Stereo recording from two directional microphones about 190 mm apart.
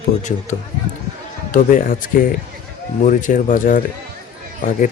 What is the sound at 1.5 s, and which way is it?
Speech, 45° left (ahead or behind).